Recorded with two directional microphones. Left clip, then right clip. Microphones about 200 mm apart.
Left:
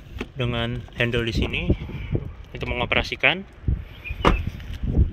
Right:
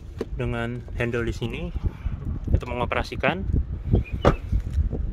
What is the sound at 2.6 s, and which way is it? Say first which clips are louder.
Speech: left 3 dB; 10° right (ahead or behind).